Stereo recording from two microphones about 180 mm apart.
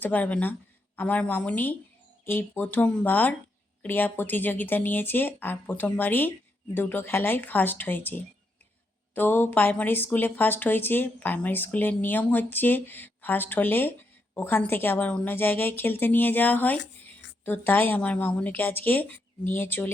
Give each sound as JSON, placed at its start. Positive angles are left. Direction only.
{"t": 0.0, "sound": "speech", "side_deg": 10}